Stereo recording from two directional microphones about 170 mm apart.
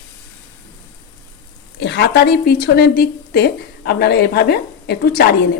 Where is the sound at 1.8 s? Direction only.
90° left; by 5.4 s 70° left (ahead or behind).